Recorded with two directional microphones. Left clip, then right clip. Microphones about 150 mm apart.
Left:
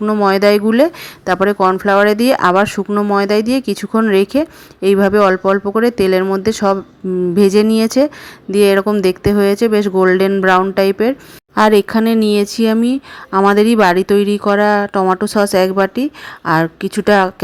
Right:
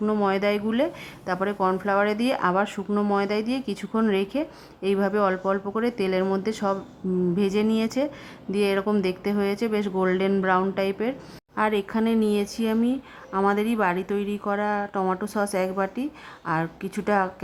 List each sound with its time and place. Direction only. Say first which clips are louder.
0.0 s speech: left 11 dB; 25° left (ahead or behind)
11.5 s speech: left 13 dB; 45° left (ahead or behind)